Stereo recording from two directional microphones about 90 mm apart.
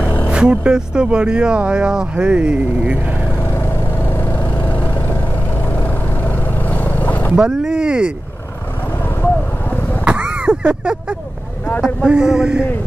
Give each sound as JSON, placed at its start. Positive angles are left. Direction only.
{"t": 0.0, "sound": "a sound", "side_deg": 20}
{"t": 0.3, "sound": "speech", "side_deg": -10}
{"t": 4.1, "sound": "vehicle", "side_deg": 20}
{"t": 7.3, "sound": "speech", "side_deg": -10}
{"t": 9.2, "sound": "vehicle", "side_deg": 20}
{"t": 10.0, "sound": "vehicle", "side_deg": -15}
{"t": 12.1, "sound": "speech", "side_deg": -5}